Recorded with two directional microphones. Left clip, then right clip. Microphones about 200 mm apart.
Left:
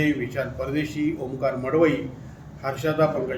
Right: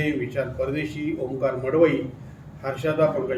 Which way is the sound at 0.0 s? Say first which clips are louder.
Left 1 dB; centre (ahead or behind).